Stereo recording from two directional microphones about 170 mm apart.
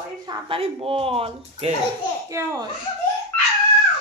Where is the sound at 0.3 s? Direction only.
30° right (ahead or behind).